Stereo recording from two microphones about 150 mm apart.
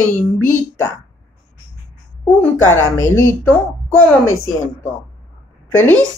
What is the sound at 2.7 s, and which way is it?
Speech, 20° left (ahead or behind).